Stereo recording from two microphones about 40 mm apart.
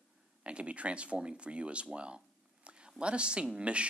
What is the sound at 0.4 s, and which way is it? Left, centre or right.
Speech, right.